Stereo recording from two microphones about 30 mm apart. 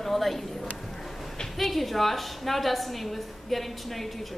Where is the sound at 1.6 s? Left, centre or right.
Centre.